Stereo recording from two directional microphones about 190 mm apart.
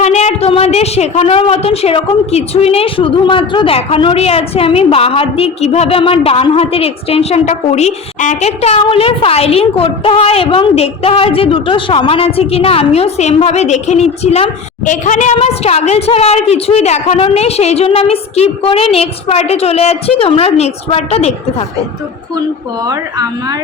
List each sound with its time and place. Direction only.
0.0 s a woman's voice: 35° left (ahead or behind)
22.9 s speech: 20° right (ahead or behind)